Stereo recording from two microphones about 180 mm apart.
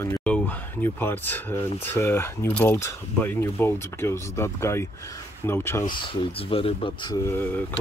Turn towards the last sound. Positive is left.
turn(degrees=10)  # may be behind; listen again after turning